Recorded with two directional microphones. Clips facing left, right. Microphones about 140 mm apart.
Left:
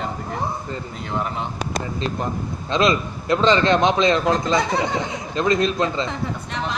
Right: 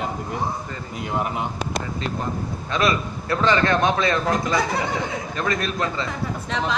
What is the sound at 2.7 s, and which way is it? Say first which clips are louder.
A man's voice: left 3 dB; 25° left (ahead or behind).